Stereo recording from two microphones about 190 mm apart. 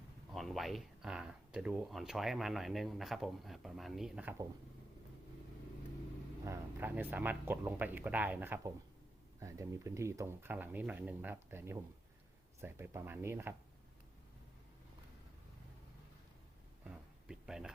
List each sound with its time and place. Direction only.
0.3 s speech: centre (ahead or behind)
6.4 s speech: 15° right (ahead or behind)
16.8 s a sound: 5° right (ahead or behind)